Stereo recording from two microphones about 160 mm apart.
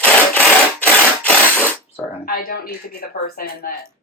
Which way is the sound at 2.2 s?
70° left (ahead or behind).